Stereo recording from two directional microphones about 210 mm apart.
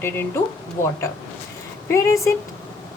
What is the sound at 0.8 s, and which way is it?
Speech, 35° left (ahead or behind).